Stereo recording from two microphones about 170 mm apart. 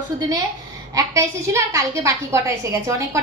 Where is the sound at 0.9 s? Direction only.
20° right (ahead or behind).